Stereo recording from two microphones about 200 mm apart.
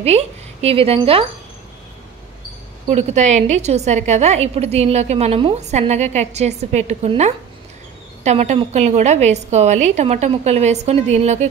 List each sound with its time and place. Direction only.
0.0 s speech: 30° right (ahead or behind)
2.9 s a woman's voice: 35° right (ahead or behind)